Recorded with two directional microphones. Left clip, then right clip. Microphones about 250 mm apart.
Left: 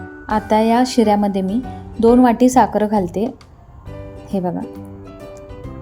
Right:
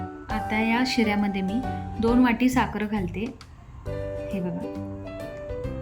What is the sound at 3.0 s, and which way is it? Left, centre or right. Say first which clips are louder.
Speech: left 11 dB; left.